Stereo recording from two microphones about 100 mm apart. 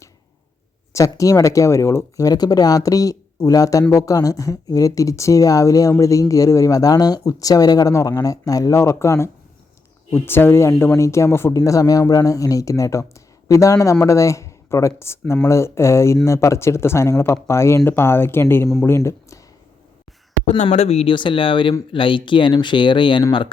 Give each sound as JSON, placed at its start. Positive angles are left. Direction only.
{"t": 0.9, "sound": "speech", "side_deg": 35}
{"t": 20.5, "sound": "speech", "side_deg": 80}
{"t": 21.2, "sound": "speech", "side_deg": 55}